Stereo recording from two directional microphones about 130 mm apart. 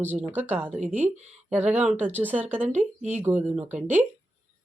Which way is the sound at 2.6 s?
65° right (ahead or behind).